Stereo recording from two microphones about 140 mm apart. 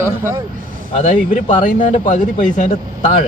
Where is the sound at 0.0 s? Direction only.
20° right (ahead or behind).